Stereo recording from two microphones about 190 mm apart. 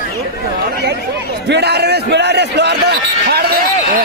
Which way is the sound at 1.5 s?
60° right (ahead or behind).